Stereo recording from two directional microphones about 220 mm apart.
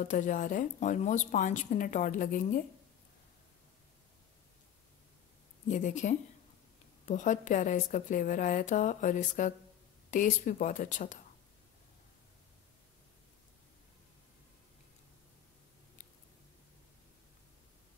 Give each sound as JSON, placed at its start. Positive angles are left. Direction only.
{"t": 0.0, "sound": "speech", "side_deg": 35}
{"t": 5.7, "sound": "speech", "side_deg": 35}